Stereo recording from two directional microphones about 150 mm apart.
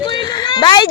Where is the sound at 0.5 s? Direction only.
30° left (ahead or behind).